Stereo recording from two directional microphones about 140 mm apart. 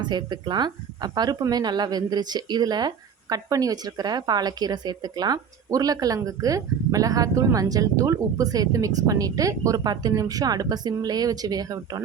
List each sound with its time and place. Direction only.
0.0 s speech: 30° right (ahead or behind)